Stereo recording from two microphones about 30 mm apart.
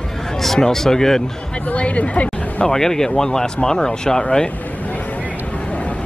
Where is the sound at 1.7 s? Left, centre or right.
Left.